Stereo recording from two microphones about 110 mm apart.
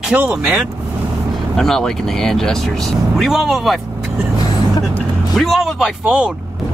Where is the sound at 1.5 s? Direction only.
5° left (ahead or behind).